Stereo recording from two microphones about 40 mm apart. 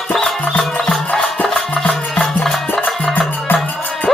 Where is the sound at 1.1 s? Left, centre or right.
Left.